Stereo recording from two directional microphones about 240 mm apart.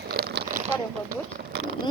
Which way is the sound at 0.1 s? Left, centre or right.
Right.